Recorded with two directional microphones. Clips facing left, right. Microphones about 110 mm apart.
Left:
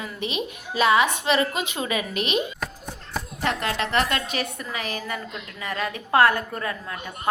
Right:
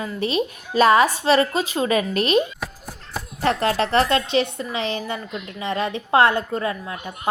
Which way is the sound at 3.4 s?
35° right (ahead or behind).